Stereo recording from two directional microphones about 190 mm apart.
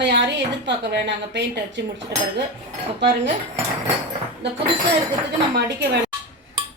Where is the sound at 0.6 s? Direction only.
65° right (ahead or behind).